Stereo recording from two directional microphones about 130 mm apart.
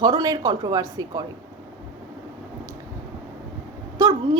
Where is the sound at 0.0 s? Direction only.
30° right (ahead or behind).